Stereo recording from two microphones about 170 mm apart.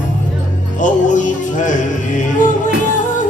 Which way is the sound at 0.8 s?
45° left (ahead or behind).